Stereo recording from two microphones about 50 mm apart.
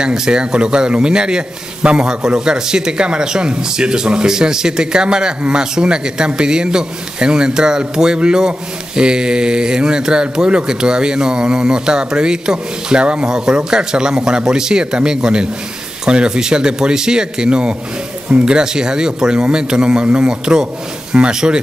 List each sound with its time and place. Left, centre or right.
0.0 s a man's voice: centre